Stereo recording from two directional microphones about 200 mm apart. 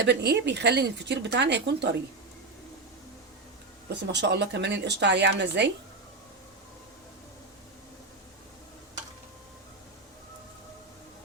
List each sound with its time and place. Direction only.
0.0 s speech: 55° right (ahead or behind)
3.8 s speech: 60° right (ahead or behind)